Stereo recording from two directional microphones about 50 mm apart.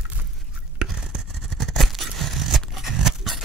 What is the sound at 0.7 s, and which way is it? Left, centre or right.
Toothbrush, centre.